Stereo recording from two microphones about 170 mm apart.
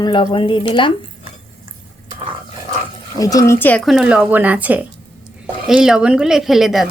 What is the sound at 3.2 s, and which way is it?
Speech, 20° left (ahead or behind).